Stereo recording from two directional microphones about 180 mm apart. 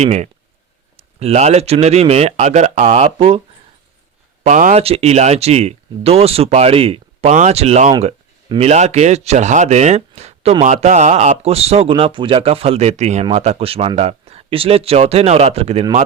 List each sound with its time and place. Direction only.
0.0 s speech: 40° right (ahead or behind)
4.4 s speech: 45° right (ahead or behind)